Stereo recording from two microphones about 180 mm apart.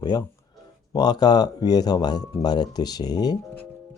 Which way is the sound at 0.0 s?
20° left (ahead or behind).